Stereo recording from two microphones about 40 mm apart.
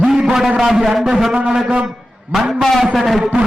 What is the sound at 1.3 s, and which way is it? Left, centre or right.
Speech, right.